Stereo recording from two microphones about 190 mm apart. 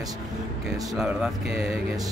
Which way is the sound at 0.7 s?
5° right (ahead or behind).